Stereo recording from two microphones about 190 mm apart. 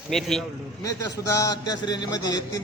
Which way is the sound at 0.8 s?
15° left (ahead or behind).